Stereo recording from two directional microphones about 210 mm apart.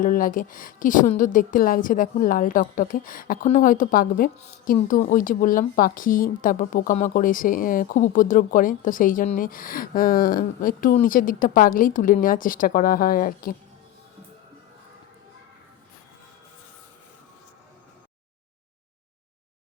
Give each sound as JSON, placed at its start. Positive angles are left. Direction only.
{"t": 0.0, "sound": "a woman's voice", "side_deg": 40}